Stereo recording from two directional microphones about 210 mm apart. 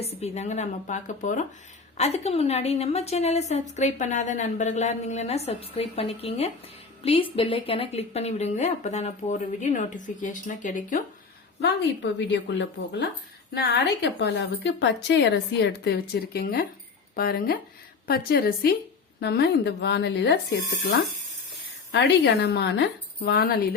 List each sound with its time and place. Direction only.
0.0 s a woman's voice: 30° left (ahead or behind)
12.3 s a woman's voice: 60° left (ahead or behind)
21.9 s a woman's voice: 50° left (ahead or behind)